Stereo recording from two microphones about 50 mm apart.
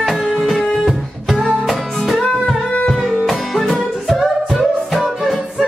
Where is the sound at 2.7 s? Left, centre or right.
Left.